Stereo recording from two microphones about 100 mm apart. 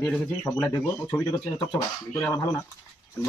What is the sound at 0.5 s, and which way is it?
Speech, 30° left (ahead or behind).